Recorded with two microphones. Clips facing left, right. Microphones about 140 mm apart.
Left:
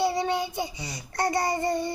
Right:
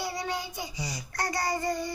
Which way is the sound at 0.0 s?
25° left (ahead or behind).